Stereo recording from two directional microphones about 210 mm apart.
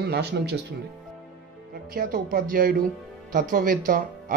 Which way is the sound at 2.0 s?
40° right (ahead or behind).